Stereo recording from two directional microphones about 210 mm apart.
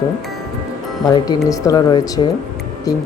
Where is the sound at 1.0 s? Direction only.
20° left (ahead or behind).